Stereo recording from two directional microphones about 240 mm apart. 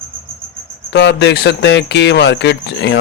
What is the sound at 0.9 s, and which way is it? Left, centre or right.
Speech, left.